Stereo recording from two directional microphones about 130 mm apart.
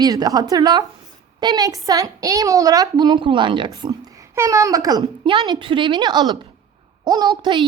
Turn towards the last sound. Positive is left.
turn(degrees=-35)  # may be behind; listen again after turning